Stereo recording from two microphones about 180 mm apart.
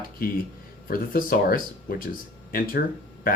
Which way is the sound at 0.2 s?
50° left (ahead or behind).